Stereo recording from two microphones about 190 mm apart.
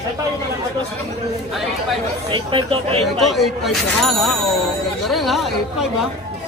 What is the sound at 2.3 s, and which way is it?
Speech, 25° right (ahead or behind).